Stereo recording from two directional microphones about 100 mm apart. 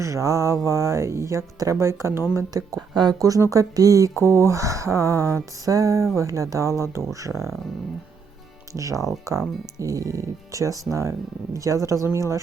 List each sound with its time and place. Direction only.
0.0 s speech: 30° right (ahead or behind)
2.9 s speech: 45° right (ahead or behind)
8.7 s speech: 35° right (ahead or behind)